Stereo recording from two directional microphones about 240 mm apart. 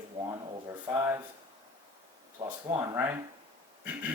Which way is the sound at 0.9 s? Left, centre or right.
Centre.